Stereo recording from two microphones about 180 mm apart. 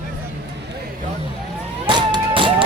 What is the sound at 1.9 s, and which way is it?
Run, 25° right (ahead or behind).